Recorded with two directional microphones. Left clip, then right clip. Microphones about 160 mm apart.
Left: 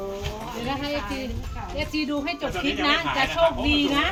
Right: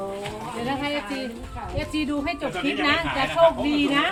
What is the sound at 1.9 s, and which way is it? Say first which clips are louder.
Speech: right 1 dB; 10° right (ahead or behind).